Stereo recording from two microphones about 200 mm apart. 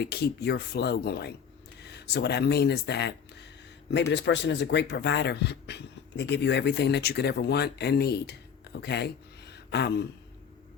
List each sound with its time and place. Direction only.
0.0 s speech: 55° left (ahead or behind)